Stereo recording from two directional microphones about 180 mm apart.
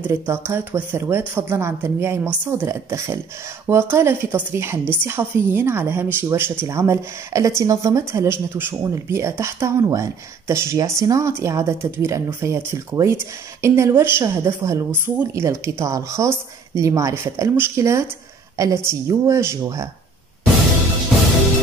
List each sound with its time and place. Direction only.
0.0 s speech: 15° right (ahead or behind)